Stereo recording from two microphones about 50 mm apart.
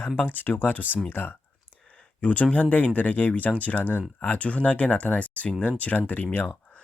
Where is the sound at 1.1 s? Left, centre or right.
Left.